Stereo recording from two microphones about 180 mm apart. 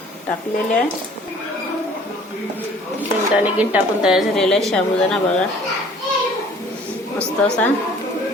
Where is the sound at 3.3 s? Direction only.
10° right (ahead or behind).